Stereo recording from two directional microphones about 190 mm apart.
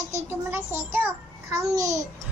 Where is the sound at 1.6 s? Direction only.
15° right (ahead or behind).